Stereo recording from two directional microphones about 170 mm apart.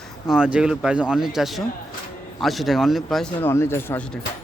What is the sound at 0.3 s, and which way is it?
Speech, 5° right (ahead or behind).